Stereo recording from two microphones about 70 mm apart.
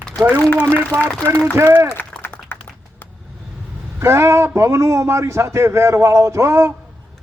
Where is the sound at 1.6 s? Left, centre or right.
Right.